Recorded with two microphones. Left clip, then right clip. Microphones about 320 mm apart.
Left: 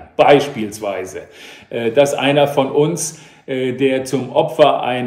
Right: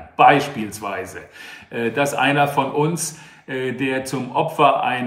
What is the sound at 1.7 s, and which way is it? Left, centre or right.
Speech, centre.